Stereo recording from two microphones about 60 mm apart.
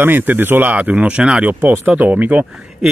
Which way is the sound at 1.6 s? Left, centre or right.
Right.